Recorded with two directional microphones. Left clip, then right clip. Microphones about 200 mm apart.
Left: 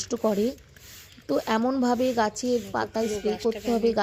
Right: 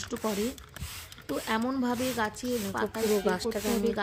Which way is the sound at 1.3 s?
10° left (ahead or behind).